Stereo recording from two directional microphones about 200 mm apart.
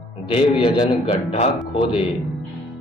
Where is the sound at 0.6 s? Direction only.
25° left (ahead or behind).